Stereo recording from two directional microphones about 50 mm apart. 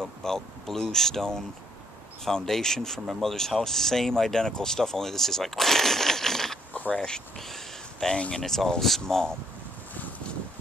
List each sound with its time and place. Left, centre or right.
0.2 s speech: centre
7.3 s a sound: centre
8.2 s speech: centre